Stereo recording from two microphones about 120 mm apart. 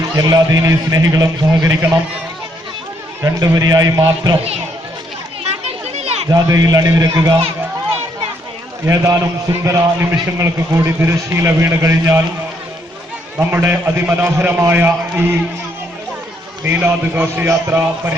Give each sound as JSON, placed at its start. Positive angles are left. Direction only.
{"t": 0.2, "sound": "a man's voice", "side_deg": -30}
{"t": 3.2, "sound": "a man's voice", "side_deg": -25}
{"t": 5.5, "sound": "a sound", "side_deg": -60}
{"t": 6.3, "sound": "a man's voice", "side_deg": -30}
{"t": 8.9, "sound": "a man's voice", "side_deg": -25}
{"t": 13.3, "sound": "a man's voice", "side_deg": -15}
{"t": 16.6, "sound": "a man's voice", "side_deg": -15}